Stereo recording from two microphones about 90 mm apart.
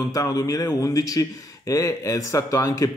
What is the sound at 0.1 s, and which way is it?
Speech, 40° left (ahead or behind).